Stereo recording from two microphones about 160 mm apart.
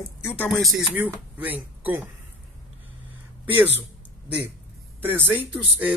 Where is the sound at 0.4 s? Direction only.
Centre (ahead or behind).